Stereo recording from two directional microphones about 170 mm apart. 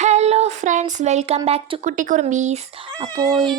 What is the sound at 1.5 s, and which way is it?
Speech, 35° right (ahead or behind).